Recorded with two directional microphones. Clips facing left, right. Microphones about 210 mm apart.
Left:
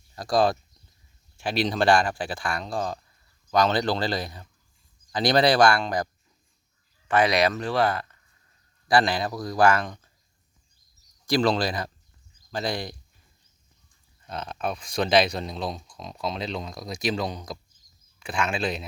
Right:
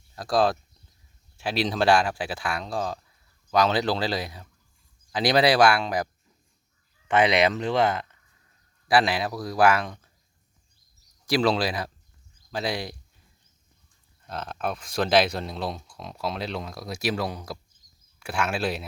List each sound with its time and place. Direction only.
0.2 s speech: centre (ahead or behind)
7.1 s speech: 20° right (ahead or behind)
8.9 s speech: 5° right (ahead or behind)
11.3 s speech: 5° right (ahead or behind)
14.3 s speech: centre (ahead or behind)